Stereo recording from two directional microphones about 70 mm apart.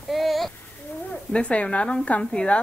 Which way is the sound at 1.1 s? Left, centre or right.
Centre.